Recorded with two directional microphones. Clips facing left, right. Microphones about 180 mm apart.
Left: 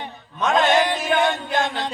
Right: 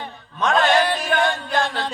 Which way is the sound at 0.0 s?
20° left (ahead or behind).